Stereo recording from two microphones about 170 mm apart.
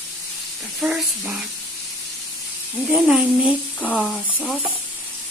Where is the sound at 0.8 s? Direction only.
10° right (ahead or behind).